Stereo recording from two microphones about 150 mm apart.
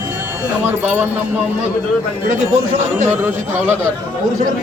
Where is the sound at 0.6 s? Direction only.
15° right (ahead or behind).